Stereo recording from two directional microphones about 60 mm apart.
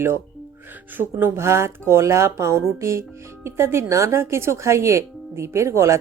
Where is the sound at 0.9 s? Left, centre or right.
Right.